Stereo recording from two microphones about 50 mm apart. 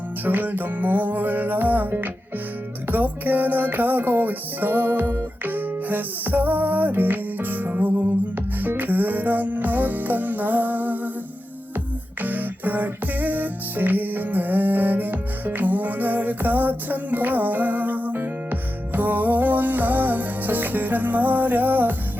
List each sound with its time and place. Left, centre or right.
0.3 s music: right
12.2 s music: right